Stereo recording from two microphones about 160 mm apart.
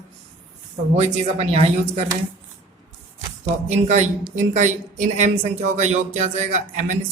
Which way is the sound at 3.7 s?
45° right (ahead or behind).